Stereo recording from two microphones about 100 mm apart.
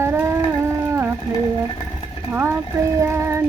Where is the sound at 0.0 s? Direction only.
25° right (ahead or behind).